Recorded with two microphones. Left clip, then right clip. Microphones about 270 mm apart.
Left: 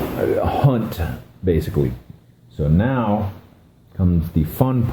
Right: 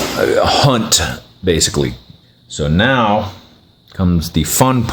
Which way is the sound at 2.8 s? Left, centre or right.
Right.